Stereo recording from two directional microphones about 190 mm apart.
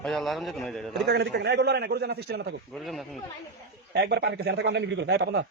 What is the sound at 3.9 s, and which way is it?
A man's voice, 60° right (ahead or behind).